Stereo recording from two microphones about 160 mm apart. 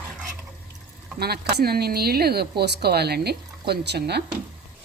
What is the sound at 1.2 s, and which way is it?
Speech, 80° right.